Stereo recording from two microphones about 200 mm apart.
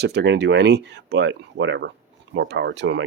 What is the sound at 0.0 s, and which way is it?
Speech, 60° right (ahead or behind).